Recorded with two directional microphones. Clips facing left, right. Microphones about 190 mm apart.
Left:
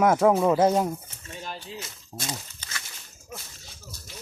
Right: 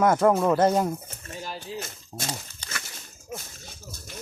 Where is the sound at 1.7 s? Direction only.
45° right (ahead or behind).